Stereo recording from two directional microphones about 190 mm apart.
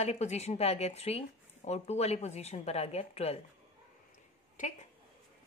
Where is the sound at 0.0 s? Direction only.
35° left (ahead or behind).